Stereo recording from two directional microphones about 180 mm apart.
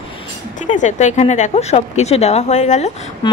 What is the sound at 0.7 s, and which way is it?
A woman's voice, 45° left (ahead or behind).